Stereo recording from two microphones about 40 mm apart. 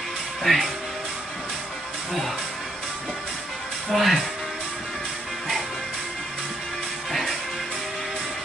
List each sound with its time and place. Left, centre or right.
0.4 s speech: centre
3.9 s speech: centre
7.1 s music: centre